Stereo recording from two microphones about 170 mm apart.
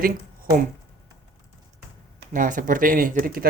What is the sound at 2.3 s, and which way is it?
Speech, 50° right (ahead or behind).